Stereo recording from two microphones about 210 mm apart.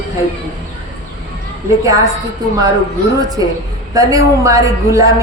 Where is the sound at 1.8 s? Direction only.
15° right (ahead or behind).